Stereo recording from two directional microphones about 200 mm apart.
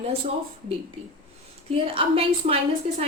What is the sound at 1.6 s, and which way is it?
Speech, 30° right (ahead or behind).